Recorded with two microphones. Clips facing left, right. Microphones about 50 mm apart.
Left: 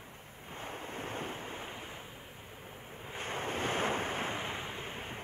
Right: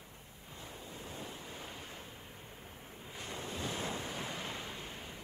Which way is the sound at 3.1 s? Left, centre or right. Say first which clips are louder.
Left 6 dB; left.